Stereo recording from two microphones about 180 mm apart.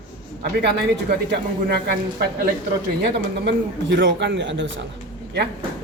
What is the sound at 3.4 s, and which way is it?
A man's voice, 75° right (ahead or behind).